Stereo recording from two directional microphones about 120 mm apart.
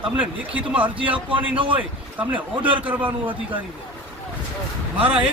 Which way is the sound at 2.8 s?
15° right (ahead or behind).